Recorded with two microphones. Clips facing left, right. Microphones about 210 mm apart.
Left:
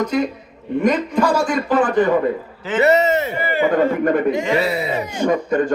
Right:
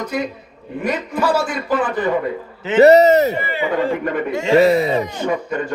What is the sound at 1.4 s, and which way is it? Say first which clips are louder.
Speech: left 3 dB; 50° left (ahead or behind).